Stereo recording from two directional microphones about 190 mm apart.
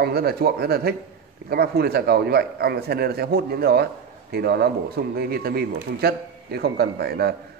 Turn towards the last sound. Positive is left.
turn(degrees=-60)  # may be behind; listen again after turning